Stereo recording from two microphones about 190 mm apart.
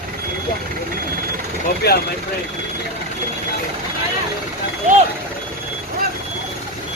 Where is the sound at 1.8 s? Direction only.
60° left (ahead or behind).